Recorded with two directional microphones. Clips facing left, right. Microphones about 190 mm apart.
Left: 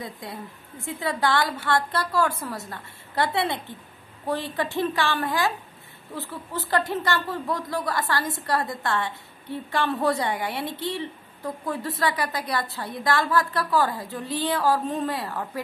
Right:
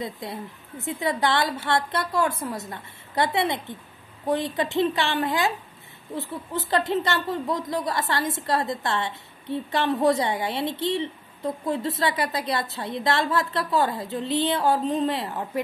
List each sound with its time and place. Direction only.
0.0 s a woman's voice: 20° right (ahead or behind)